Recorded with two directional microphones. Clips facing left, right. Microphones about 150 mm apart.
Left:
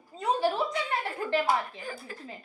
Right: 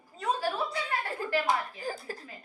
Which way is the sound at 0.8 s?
25° left (ahead or behind).